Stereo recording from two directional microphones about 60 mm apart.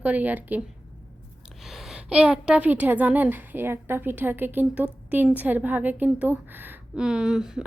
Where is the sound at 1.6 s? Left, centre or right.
Centre.